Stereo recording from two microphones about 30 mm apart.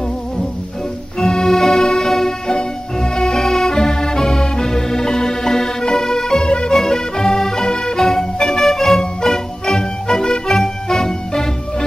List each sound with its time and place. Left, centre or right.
1.4 s music: centre
2.5 s music: left
6.4 s music: left
6.7 s music: centre